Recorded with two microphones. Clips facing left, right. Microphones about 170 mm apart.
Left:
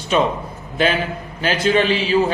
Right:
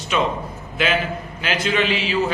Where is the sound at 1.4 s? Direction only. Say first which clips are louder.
Left 5 dB; 35° left (ahead or behind).